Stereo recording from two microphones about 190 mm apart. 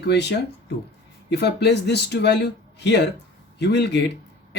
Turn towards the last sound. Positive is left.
turn(degrees=65)  # may be behind; listen again after turning